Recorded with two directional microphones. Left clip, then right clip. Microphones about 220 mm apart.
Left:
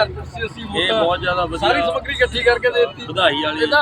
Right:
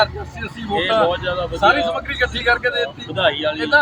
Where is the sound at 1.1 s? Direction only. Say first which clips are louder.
Left 3 dB; 50° left (ahead or behind).